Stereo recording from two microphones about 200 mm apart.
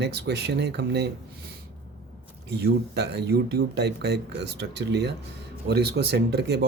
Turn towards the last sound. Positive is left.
turn(degrees=-55)  # may be behind; listen again after turning